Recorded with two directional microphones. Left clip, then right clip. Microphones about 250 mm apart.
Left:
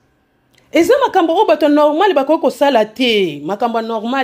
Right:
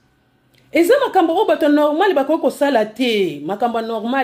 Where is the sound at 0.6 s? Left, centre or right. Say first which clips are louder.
Left 2 dB; left.